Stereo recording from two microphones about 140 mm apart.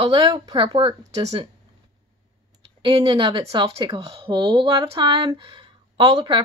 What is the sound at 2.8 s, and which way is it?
Speech, 35° right (ahead or behind).